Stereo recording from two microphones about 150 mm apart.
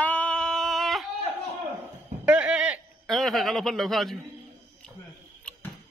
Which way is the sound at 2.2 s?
10° right (ahead or behind).